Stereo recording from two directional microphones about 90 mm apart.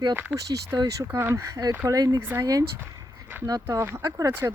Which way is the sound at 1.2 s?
25° right (ahead or behind).